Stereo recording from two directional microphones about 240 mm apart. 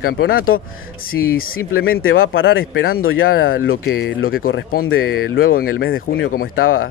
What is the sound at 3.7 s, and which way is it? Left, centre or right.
Speech, left.